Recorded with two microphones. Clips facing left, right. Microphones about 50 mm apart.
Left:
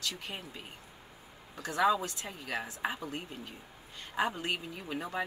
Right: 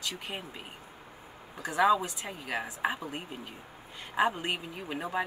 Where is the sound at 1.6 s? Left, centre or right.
Centre.